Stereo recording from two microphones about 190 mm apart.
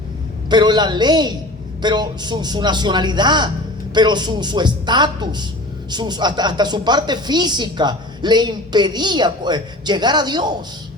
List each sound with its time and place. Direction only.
0.5 s a woman's voice: 20° right (ahead or behind)